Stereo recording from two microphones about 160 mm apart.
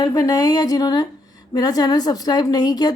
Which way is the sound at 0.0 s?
25° left (ahead or behind).